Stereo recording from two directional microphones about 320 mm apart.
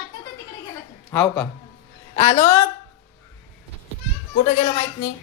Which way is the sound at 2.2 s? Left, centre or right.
Centre.